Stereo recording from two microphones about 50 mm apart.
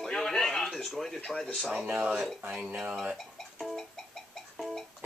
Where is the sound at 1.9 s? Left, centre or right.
Right.